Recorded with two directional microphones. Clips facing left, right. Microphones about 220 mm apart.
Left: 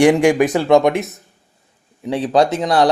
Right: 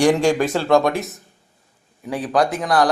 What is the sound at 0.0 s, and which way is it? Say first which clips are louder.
A man's voice: left 4 dB; 20° left (ahead or behind).